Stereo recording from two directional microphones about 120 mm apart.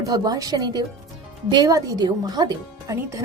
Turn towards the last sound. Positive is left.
turn(degrees=-30)  # may be behind; listen again after turning